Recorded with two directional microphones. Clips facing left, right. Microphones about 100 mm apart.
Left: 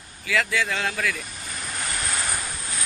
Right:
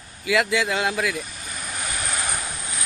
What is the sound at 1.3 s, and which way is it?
Vehicle, centre (ahead or behind).